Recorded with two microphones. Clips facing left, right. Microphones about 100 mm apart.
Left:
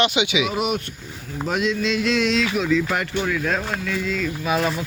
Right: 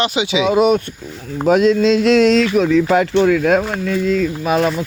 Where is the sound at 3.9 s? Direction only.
40° right (ahead or behind).